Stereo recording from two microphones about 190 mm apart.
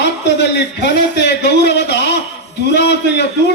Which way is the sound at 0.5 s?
65° left (ahead or behind).